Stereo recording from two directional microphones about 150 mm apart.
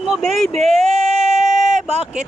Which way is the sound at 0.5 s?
45° right (ahead or behind).